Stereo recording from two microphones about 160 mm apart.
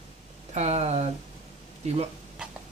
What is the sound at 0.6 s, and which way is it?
Speech, 45° right (ahead or behind).